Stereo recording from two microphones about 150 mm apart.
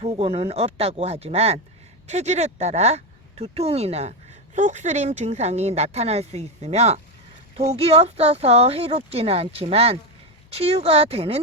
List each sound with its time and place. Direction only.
0.2 s speech: 40° right (ahead or behind)